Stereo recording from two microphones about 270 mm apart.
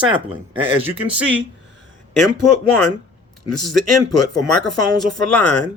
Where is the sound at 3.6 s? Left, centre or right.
Centre.